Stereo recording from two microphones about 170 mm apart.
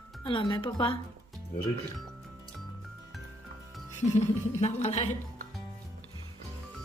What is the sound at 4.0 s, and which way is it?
Speech, 40° left (ahead or behind).